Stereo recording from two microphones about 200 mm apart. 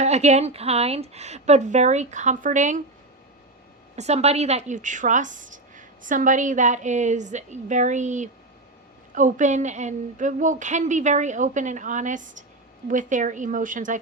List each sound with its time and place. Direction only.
0.0 s a woman's voice: 35° right (ahead or behind)
3.9 s a woman's voice: 35° right (ahead or behind)